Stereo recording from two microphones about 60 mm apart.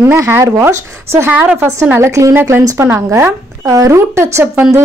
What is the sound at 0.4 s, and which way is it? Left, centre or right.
Speech, right.